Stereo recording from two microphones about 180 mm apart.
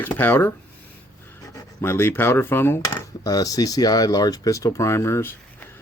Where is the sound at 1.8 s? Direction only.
15° left (ahead or behind).